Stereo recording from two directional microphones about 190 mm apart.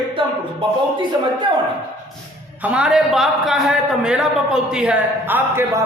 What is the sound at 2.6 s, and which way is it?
A man's voice, 5° right (ahead or behind).